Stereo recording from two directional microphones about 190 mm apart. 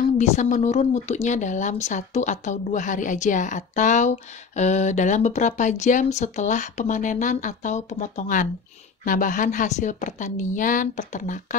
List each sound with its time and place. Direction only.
0.2 s speech: 40° left (ahead or behind)